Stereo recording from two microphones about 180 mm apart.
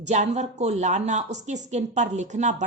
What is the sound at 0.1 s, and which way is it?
Speech, 40° right (ahead or behind).